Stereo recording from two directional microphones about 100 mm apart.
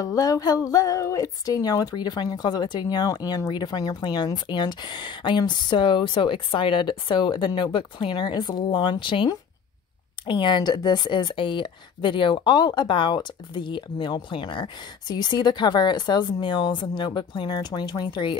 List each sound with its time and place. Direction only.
0.0 s speech: 35° left (ahead or behind); by 18.4 s 50° left (ahead or behind)